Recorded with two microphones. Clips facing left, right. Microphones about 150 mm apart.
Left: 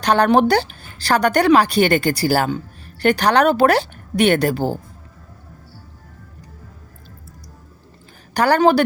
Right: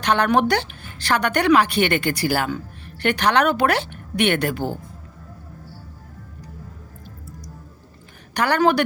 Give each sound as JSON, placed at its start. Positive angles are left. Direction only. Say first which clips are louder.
{"t": 0.0, "sound": "a woman's voice", "louder": "left 4 dB", "side_deg": 35}
{"t": 8.3, "sound": "a woman's voice", "louder": "left 4 dB", "side_deg": 35}